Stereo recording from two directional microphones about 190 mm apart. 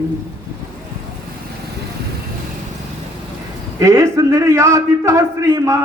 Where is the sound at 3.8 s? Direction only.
15° right (ahead or behind).